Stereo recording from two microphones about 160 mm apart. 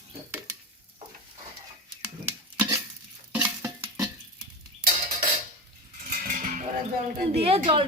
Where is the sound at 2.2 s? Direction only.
15° right (ahead or behind).